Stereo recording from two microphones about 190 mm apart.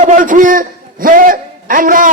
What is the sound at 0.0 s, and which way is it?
A man's voice, 40° right (ahead or behind).